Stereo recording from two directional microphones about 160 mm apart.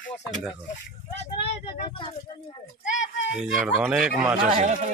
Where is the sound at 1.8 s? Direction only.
30° left (ahead or behind).